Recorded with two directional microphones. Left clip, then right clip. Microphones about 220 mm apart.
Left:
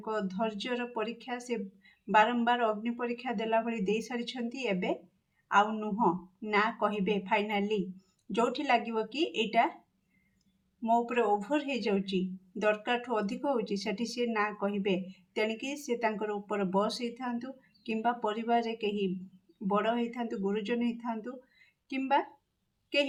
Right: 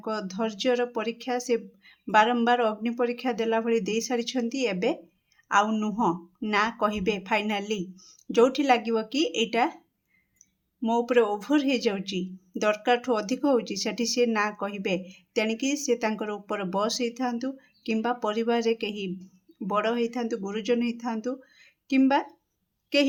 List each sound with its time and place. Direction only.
0.0 s speech: 45° right (ahead or behind)
10.8 s speech: 40° right (ahead or behind)